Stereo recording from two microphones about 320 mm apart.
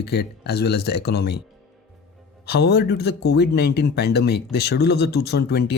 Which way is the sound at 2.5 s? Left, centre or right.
Left.